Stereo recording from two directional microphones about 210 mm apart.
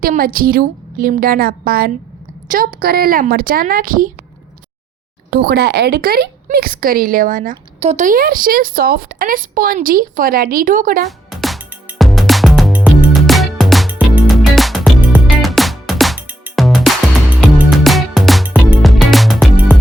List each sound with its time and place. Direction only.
0.0 s speech: 45° right (ahead or behind)
5.3 s speech: 50° right (ahead or behind)
7.5 s speech: 30° right (ahead or behind)
11.3 s music: centre (ahead or behind)